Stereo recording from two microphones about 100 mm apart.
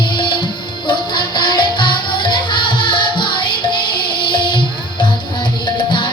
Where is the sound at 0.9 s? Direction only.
50° left (ahead or behind).